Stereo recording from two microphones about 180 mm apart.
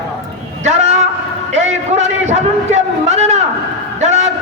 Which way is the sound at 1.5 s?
40° right (ahead or behind).